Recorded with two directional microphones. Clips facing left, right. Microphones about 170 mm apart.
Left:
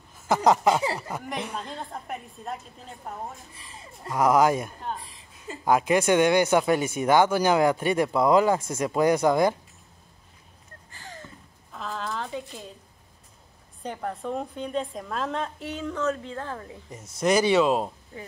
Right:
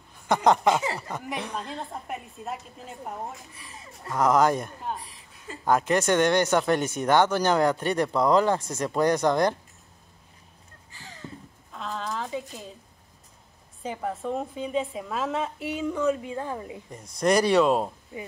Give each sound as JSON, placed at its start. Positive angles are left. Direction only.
{"t": 0.3, "sound": "a woman's voice", "side_deg": 5}
{"t": 1.6, "sound": "a woman's voice", "side_deg": -5}
{"t": 4.1, "sound": "speech", "side_deg": 10}
{"t": 10.9, "sound": "a sound", "side_deg": 50}
{"t": 11.7, "sound": "speech", "side_deg": 0}
{"t": 13.8, "sound": "a woman's voice", "side_deg": 0}
{"t": 16.9, "sound": "a woman's voice", "side_deg": 5}